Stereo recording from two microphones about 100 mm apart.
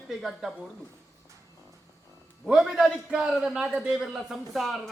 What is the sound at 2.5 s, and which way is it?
A man's voice, 5° right (ahead or behind).